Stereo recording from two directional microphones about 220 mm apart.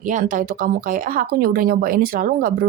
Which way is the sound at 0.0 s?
35° right (ahead or behind).